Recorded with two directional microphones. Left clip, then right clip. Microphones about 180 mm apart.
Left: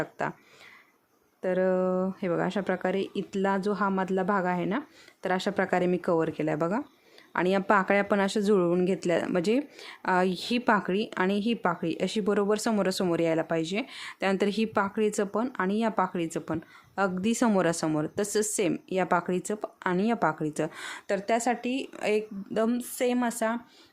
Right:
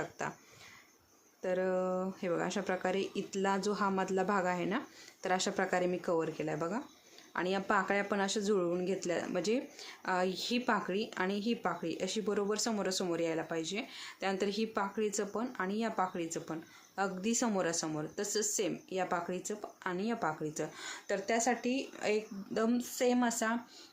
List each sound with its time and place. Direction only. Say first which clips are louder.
0.0 s speech: left 7 dB; 45° left (ahead or behind)
1.4 s speech: left 7 dB; 40° left (ahead or behind)